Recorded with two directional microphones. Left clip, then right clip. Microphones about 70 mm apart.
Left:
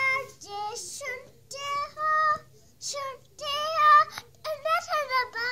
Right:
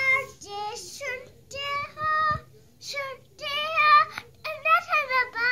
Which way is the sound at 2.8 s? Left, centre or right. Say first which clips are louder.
Right 1 dB; left.